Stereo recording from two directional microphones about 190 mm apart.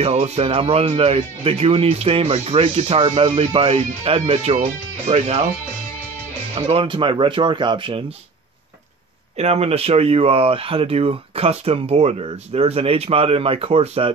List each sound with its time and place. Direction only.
0.0 s speech: 35° right (ahead or behind)
6.5 s speech: 25° right (ahead or behind)
9.4 s speech: 35° right (ahead or behind)